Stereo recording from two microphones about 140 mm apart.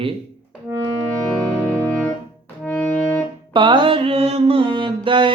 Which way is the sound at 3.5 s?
35° right (ahead or behind).